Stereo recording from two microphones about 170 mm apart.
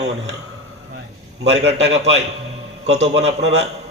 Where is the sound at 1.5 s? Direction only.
40° right (ahead or behind).